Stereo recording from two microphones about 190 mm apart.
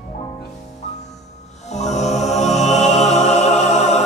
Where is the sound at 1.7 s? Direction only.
35° left (ahead or behind).